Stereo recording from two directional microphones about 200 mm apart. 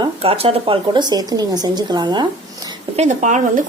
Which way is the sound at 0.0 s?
30° right (ahead or behind).